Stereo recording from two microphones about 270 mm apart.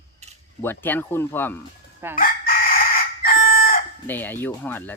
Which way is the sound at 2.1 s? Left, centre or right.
Left.